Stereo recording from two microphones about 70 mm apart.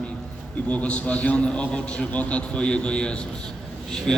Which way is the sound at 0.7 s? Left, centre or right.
Centre.